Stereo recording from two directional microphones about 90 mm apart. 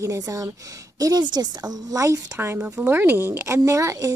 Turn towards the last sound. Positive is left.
turn(degrees=-35)  # may be behind; listen again after turning